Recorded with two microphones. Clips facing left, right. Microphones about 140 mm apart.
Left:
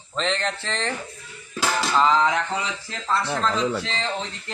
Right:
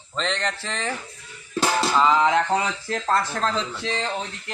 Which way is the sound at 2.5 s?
50° right (ahead or behind).